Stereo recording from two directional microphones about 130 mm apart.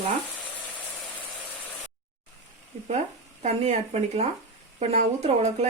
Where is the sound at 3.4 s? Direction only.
60° right (ahead or behind).